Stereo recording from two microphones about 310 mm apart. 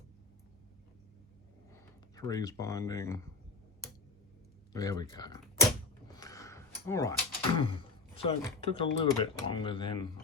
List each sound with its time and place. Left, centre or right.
1.7 s speech: centre
4.7 s speech: centre
6.1 s a sound: centre
7.5 s speech: centre